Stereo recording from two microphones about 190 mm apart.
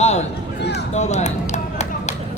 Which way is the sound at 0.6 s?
60° left (ahead or behind).